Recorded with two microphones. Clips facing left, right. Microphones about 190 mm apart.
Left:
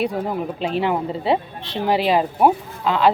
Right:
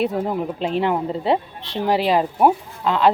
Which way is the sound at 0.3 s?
10° left (ahead or behind).